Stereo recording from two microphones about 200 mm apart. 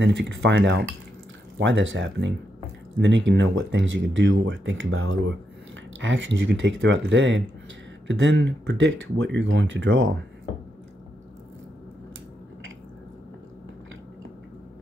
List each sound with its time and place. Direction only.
0.0 s speech: 65° right (ahead or behind)